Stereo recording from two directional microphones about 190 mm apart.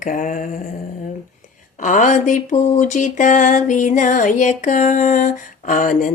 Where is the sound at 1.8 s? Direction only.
45° left (ahead or behind).